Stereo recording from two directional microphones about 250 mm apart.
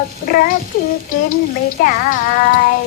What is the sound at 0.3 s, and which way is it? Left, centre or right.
Speech, left.